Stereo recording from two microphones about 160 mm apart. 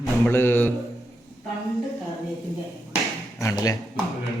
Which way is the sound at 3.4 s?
20° left (ahead or behind).